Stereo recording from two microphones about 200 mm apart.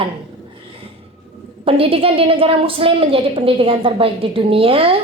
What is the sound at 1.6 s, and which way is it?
A woman's voice, 30° right (ahead or behind).